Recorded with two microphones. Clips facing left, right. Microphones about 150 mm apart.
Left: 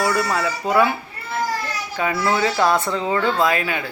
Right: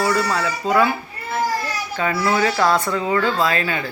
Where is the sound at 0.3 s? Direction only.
15° left (ahead or behind).